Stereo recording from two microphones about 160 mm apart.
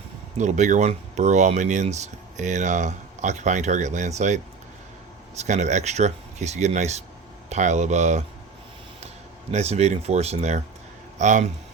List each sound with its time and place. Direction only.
0.3 s speech: 45° right (ahead or behind)
9.5 s speech: 45° right (ahead or behind)